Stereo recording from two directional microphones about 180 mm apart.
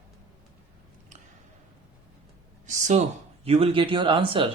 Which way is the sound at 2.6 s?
40° right (ahead or behind).